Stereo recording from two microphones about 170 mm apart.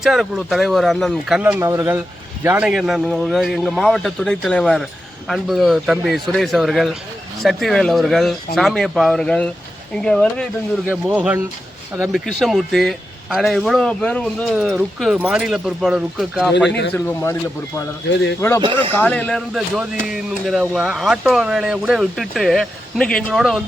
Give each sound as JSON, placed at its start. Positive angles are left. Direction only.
{"t": 0.0, "sound": "speech", "side_deg": 0}
{"t": 1.4, "sound": "speech", "side_deg": -10}
{"t": 10.8, "sound": "speech", "side_deg": -5}
{"t": 14.5, "sound": "speech", "side_deg": -5}
{"t": 16.6, "sound": "speech", "side_deg": 90}
{"t": 16.9, "sound": "speech", "side_deg": 10}
{"t": 18.1, "sound": "speech", "side_deg": 90}
{"t": 18.3, "sound": "speech", "side_deg": 15}
{"t": 19.5, "sound": "speech", "side_deg": -5}